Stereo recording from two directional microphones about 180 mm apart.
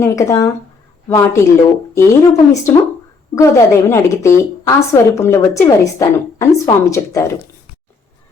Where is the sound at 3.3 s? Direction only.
15° left (ahead or behind).